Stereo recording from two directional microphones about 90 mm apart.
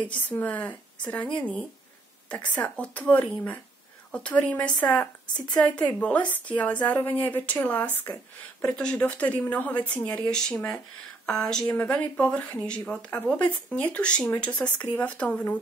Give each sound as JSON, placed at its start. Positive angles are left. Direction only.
{"t": 0.0, "sound": "speech", "side_deg": 15}